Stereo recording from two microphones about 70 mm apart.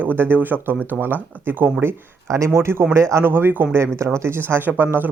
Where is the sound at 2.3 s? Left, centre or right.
Right.